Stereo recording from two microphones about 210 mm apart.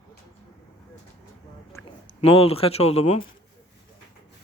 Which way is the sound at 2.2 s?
25° left (ahead or behind).